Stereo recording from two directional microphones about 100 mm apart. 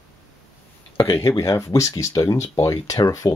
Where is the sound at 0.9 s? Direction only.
30° left (ahead or behind).